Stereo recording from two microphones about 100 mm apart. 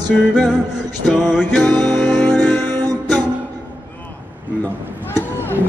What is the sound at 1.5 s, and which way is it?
Music, 20° left (ahead or behind).